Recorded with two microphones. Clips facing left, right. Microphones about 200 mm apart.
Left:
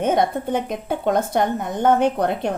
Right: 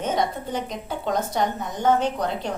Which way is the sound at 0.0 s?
55° left (ahead or behind).